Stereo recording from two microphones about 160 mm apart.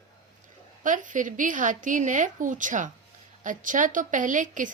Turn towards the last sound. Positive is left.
turn(degrees=-55)  # may be behind; listen again after turning